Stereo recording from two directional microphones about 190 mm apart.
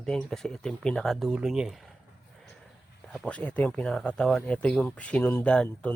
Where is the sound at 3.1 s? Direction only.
5° left (ahead or behind).